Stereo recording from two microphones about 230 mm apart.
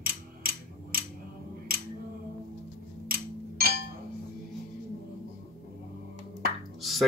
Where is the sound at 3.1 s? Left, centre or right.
Right.